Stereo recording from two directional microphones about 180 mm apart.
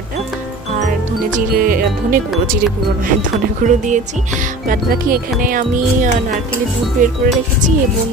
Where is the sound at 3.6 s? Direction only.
45° right (ahead or behind).